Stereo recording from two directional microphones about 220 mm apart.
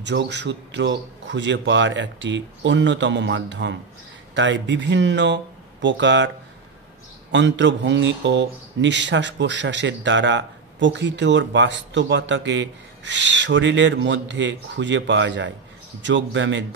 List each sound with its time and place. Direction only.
0.0 s speech: 55° right (ahead or behind)